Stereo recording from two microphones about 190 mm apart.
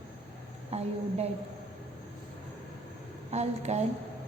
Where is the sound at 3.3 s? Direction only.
35° right (ahead or behind).